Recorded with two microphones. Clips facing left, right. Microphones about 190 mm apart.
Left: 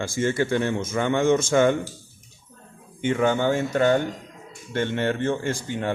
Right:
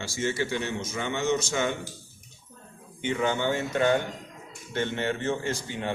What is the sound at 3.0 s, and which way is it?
Speech, 50° left (ahead or behind).